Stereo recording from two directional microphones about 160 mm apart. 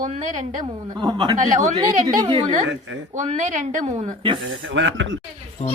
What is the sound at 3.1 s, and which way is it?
A woman's voice, 50° right (ahead or behind).